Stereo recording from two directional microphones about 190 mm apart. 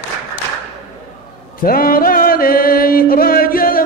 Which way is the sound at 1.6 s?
50° left (ahead or behind).